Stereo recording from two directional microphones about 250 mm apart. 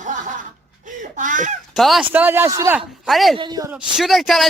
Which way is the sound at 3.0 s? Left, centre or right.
Centre.